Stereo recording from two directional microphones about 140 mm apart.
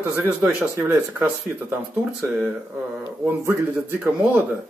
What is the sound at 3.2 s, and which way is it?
Speech, 20° right (ahead or behind).